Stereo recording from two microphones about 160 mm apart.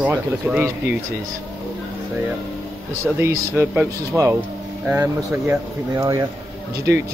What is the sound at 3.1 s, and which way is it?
Speech, 15° right (ahead or behind).